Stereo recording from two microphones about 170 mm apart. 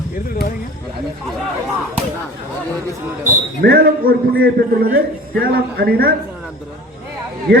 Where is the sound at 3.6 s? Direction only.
65° right (ahead or behind).